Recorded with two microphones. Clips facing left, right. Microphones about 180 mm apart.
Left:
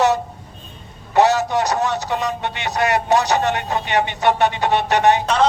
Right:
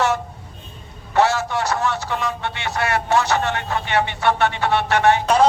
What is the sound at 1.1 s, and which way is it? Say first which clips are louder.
Speech: left 3 dB; 15° left (ahead or behind).